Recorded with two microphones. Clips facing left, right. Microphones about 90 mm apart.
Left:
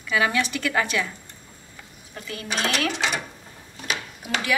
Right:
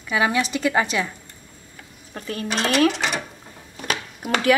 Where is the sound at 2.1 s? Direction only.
45° right (ahead or behind).